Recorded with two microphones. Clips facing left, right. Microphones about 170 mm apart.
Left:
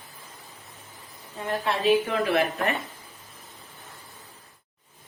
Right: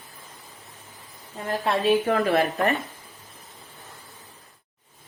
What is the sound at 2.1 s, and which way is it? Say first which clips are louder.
Speech: right 2 dB; 40° right (ahead or behind).